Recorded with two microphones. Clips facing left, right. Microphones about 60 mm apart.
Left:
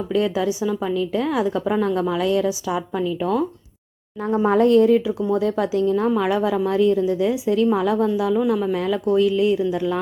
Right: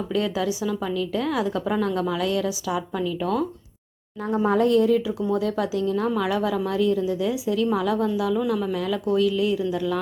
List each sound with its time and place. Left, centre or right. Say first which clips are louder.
0.1 s a woman's voice: left 4 dB; left